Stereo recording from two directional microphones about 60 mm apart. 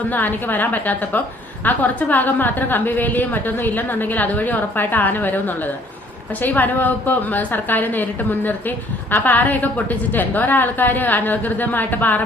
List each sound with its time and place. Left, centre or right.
0.1 s a woman's voice: left